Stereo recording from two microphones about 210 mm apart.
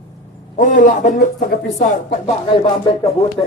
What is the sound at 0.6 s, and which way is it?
Speech, 35° left (ahead or behind).